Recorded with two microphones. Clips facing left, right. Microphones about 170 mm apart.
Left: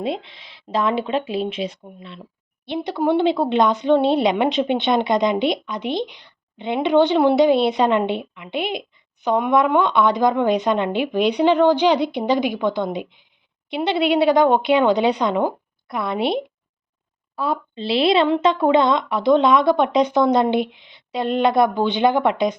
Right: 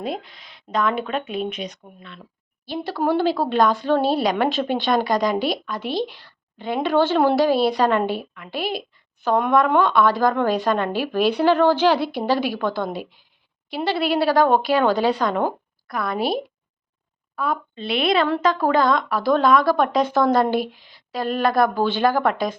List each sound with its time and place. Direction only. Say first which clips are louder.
0.0 s a woman's voice: left 3 dB; 25° left (ahead or behind)